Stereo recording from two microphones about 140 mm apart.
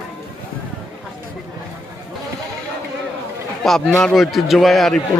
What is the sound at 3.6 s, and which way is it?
A man's voice, centre (ahead or behind).